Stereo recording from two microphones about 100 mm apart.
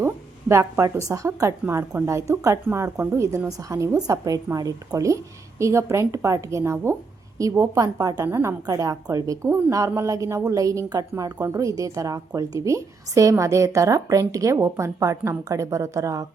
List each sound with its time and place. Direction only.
0.0 s a woman's voice: 25° right (ahead or behind)